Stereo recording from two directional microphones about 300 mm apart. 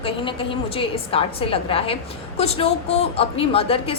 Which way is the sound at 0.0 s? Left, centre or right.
Centre.